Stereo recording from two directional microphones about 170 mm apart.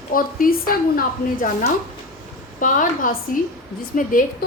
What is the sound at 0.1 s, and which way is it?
A woman's voice, 55° left (ahead or behind).